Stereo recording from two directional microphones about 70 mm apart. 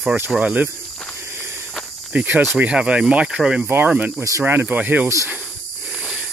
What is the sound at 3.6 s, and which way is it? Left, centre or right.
Speech, right.